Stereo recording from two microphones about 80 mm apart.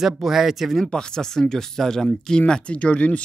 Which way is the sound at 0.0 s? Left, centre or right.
Centre.